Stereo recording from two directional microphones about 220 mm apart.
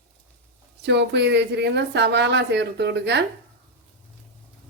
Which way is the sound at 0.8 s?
50° right (ahead or behind).